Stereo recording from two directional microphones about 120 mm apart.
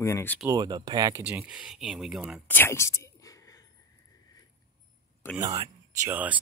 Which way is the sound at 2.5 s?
20° left (ahead or behind).